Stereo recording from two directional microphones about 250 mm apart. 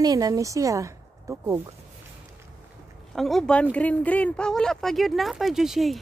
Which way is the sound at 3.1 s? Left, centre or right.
Centre.